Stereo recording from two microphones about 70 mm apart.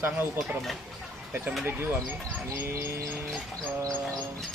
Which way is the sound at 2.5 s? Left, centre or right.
Right.